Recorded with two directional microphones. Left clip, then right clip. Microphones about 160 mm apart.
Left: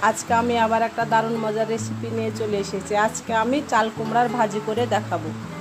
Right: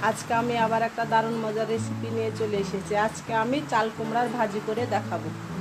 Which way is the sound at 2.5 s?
25° left (ahead or behind).